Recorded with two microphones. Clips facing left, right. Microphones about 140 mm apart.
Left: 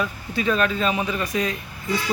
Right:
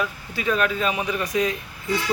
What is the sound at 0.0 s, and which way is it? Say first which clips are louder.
A man's voice: left 2 dB; 5° right (ahead or behind).